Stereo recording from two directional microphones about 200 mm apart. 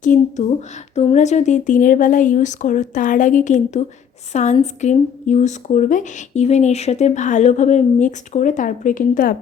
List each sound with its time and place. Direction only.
0.0 s speech: 40° left (ahead or behind)